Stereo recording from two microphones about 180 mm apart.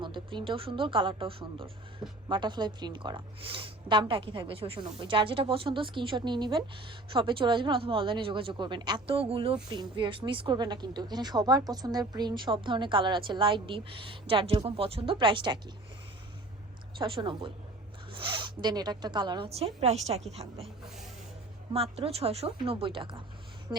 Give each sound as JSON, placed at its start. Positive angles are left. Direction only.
{"t": 0.0, "sound": "a woman's voice", "side_deg": -25}
{"t": 17.0, "sound": "a woman's voice", "side_deg": -25}
{"t": 21.7, "sound": "a woman's voice", "side_deg": -35}